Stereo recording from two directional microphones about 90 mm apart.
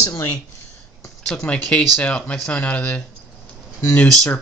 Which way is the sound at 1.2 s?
10° left (ahead or behind).